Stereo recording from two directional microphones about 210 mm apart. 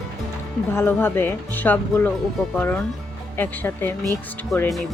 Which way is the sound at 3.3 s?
10° left (ahead or behind).